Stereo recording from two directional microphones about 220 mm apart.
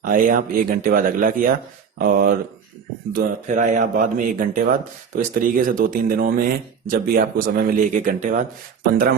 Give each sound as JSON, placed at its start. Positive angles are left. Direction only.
{"t": 0.0, "sound": "speech", "side_deg": -40}